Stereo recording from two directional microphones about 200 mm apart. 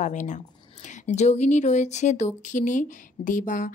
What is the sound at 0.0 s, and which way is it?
Speech, 40° left (ahead or behind).